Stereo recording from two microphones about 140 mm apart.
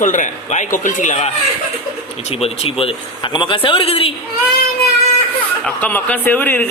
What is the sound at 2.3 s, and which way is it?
A man's voice, 45° left (ahead or behind).